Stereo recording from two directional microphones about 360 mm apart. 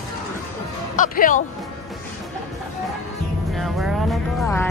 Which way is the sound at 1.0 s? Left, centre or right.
Left.